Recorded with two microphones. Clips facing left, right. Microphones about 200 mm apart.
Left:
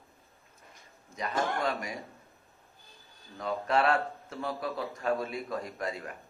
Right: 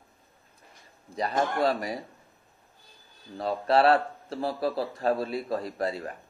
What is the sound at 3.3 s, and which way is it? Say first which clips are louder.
A man's voice: right 5 dB; 35° right (ahead or behind).